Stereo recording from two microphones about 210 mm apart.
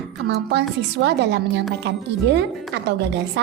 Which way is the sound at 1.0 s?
55° right (ahead or behind).